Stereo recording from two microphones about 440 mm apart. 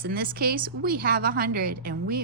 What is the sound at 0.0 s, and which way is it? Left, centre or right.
A woman's voice, centre.